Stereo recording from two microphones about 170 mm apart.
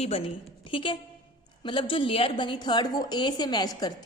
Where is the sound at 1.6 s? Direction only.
30° left (ahead or behind).